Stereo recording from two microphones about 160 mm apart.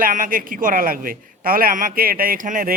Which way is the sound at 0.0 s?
60° right (ahead or behind).